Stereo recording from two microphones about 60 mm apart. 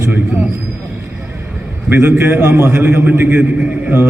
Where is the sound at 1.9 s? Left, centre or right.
Right.